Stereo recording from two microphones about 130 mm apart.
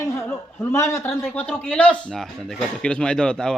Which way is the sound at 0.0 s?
20° left (ahead or behind).